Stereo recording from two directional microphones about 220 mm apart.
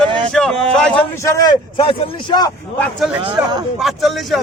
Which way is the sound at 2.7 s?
5° left (ahead or behind).